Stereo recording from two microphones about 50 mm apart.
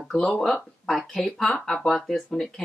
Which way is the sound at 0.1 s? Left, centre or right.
Centre.